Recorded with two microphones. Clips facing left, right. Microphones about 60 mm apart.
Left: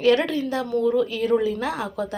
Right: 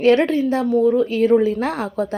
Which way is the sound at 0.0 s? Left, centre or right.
Right.